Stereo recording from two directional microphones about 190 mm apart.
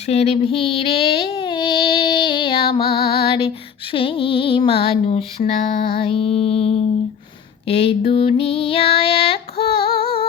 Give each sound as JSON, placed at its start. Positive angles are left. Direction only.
{"t": 0.0, "sound": "child singing", "side_deg": 35}
{"t": 3.9, "sound": "female singing", "side_deg": 30}
{"t": 5.9, "sound": "a sound", "side_deg": 30}
{"t": 7.7, "sound": "female singing", "side_deg": 30}